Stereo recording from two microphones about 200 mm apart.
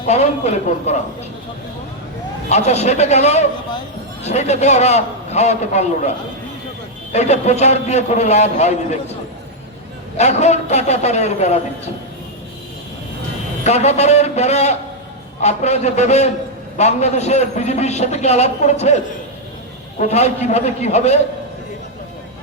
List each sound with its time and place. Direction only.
0.0 s a man's voice: 35° left (ahead or behind)
2.5 s a man's voice: 35° left (ahead or behind)
10.2 s a man's voice: 35° left (ahead or behind)
13.7 s a man's voice: 35° left (ahead or behind)